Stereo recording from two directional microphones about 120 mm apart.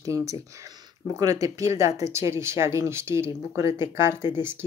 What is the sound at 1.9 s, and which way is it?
Speech, 65° left (ahead or behind).